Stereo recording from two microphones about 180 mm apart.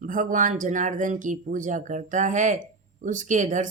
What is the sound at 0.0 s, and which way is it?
Speech, 45° right (ahead or behind).